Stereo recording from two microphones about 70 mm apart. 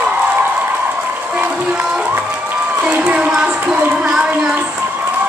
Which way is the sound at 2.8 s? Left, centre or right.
Centre.